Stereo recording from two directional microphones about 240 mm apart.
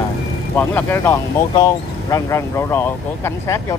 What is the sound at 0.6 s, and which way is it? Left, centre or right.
Speech, centre.